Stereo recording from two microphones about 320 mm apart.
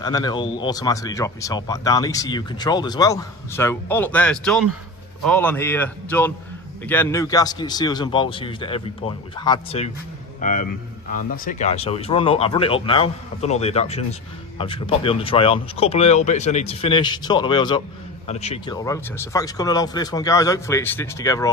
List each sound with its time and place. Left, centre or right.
0.0 s a man's voice: centre